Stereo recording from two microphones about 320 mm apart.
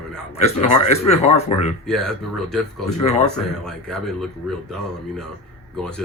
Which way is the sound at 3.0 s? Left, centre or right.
Centre.